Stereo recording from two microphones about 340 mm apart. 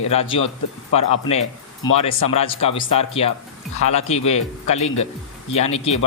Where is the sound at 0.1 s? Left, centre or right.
Centre.